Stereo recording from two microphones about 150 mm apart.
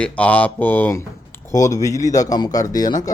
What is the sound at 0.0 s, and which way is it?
Speech, 10° left (ahead or behind).